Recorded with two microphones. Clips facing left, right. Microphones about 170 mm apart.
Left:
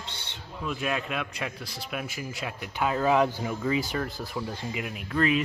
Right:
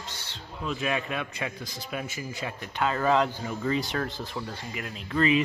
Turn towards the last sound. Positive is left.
turn(degrees=0)  # may be behind; listen again after turning